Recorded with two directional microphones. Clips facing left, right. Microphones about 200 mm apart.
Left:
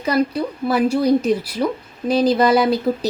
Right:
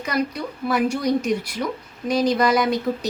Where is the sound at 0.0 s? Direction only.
30° left (ahead or behind).